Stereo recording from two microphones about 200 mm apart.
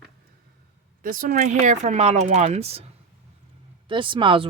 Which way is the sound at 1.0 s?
45° right (ahead or behind).